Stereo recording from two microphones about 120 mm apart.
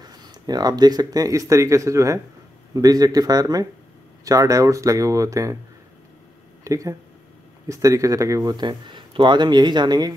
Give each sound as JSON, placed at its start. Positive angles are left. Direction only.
{"t": 0.0, "sound": "speech", "side_deg": -35}
{"t": 6.6, "sound": "speech", "side_deg": -25}